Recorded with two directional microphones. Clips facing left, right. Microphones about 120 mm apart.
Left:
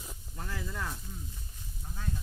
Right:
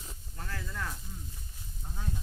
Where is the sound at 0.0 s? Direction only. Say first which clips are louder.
Left 2 dB; 10° left (ahead or behind).